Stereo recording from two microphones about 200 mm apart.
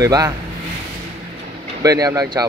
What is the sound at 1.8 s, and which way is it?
Speech, 20° right (ahead or behind).